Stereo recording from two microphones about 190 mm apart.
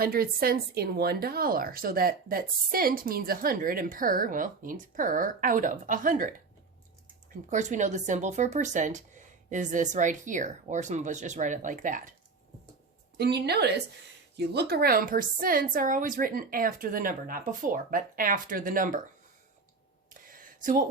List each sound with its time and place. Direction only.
0.0 s speech: 50° right (ahead or behind)
7.5 s speech: 40° right (ahead or behind)
13.1 s a woman's voice: 60° right (ahead or behind)
20.1 s a sound: 45° right (ahead or behind)